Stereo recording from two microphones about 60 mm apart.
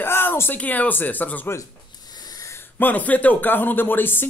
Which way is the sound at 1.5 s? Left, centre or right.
Left.